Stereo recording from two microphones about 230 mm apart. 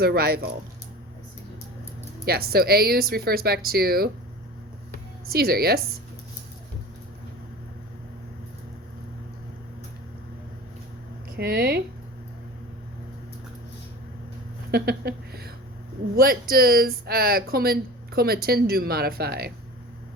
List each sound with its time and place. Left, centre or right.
0.0 s speech: right
2.2 s speech: right
5.3 s speech: right
11.3 s speech: right
14.7 s a sound: right
16.1 s speech: right